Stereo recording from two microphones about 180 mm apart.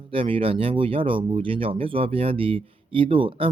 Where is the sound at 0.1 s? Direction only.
30° right (ahead or behind).